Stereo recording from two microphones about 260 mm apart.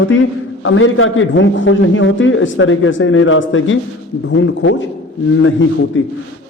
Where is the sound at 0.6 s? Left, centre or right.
Left.